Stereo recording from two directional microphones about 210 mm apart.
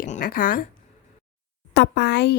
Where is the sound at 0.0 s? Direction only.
40° left (ahead or behind).